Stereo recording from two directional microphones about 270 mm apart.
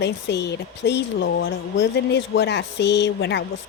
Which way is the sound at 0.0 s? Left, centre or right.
Left.